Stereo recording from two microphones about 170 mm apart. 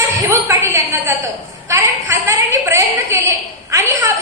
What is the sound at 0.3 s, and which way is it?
A woman's voice, 15° right (ahead or behind).